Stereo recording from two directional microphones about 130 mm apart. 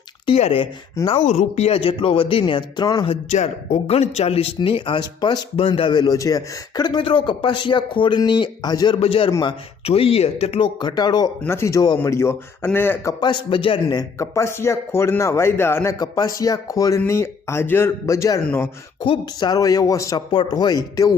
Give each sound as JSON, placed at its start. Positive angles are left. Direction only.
{"t": 0.3, "sound": "speech", "side_deg": 50}
{"t": 3.1, "sound": "a man's voice", "side_deg": 60}
{"t": 9.0, "sound": "speech", "side_deg": 45}
{"t": 10.8, "sound": "a man's voice", "side_deg": 35}
{"t": 11.4, "sound": "speech", "side_deg": 20}
{"t": 13.1, "sound": "a man's voice", "side_deg": 35}
{"t": 13.8, "sound": "speech", "side_deg": 25}
{"t": 16.0, "sound": "speech", "side_deg": 30}
{"t": 19.0, "sound": "speech", "side_deg": 35}
{"t": 20.3, "sound": "a man's voice", "side_deg": 35}